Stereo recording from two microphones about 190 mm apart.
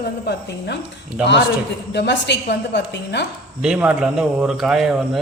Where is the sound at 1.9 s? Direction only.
65° left (ahead or behind).